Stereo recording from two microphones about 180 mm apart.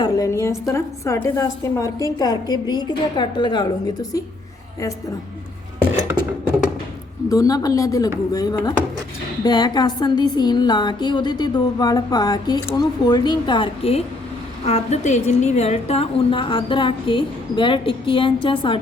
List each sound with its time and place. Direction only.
0.0 s a woman's voice: 15° left (ahead or behind)
7.3 s a woman's voice: 20° left (ahead or behind)